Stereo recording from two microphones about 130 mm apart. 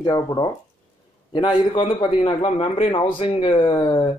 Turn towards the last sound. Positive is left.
turn(degrees=45)  # may be behind; listen again after turning